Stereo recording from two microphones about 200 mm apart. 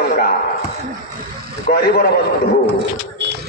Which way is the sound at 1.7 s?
50° left (ahead or behind).